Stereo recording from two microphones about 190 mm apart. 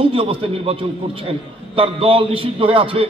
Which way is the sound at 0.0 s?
30° right (ahead or behind).